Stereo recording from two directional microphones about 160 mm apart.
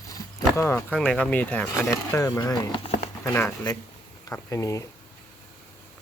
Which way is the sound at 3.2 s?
15° left (ahead or behind).